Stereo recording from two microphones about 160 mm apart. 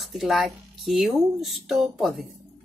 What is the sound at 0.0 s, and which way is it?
Speech, centre (ahead or behind).